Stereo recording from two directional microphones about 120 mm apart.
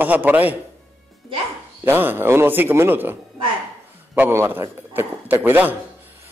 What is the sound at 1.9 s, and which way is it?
A man's voice, 15° right (ahead or behind).